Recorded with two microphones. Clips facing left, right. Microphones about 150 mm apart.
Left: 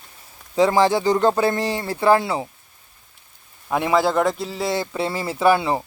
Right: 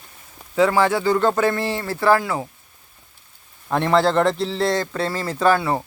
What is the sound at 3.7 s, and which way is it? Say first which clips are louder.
Speech: right 1 dB; 10° left (ahead or behind).